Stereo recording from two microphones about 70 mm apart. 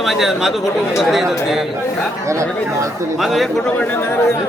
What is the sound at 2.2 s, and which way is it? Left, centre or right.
Speech, right.